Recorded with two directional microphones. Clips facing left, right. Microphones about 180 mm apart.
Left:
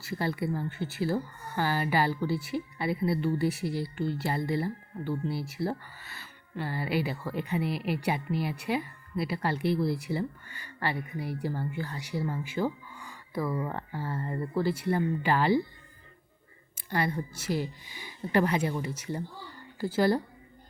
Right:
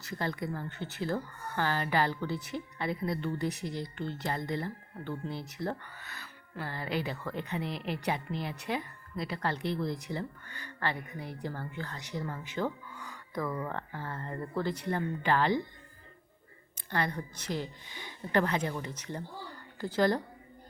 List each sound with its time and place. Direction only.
0.1 s a woman's voice: 10° left (ahead or behind)
16.7 s a woman's voice: 10° left (ahead or behind)